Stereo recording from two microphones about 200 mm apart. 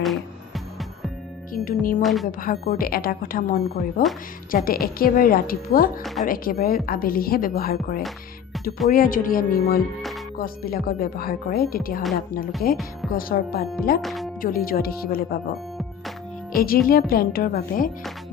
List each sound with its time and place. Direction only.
0.0 s music: centre (ahead or behind)
1.5 s speech: 45° left (ahead or behind)
2.0 s speech: centre (ahead or behind)
2.2 s speech: 45° left (ahead or behind)
6.0 s speech: centre (ahead or behind)
6.2 s speech: 45° left (ahead or behind)
14.0 s speech: centre (ahead or behind)
14.4 s speech: 45° left (ahead or behind)
16.6 s speech: 50° left (ahead or behind)